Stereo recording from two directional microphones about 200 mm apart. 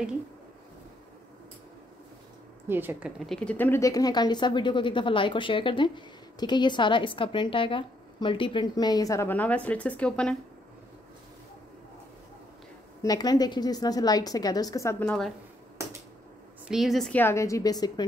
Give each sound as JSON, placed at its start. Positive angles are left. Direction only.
{"t": 2.7, "sound": "a woman's voice", "side_deg": -10}
{"t": 3.2, "sound": "speech", "side_deg": 5}
{"t": 13.0, "sound": "speech", "side_deg": 20}
{"t": 16.6, "sound": "a woman's voice", "side_deg": 0}